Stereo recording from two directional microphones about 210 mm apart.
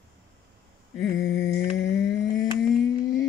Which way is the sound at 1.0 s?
15° left (ahead or behind).